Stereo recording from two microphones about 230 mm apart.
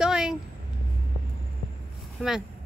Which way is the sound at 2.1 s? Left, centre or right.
Centre.